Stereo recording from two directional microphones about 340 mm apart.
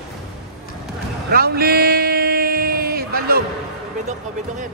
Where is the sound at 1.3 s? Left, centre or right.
Right.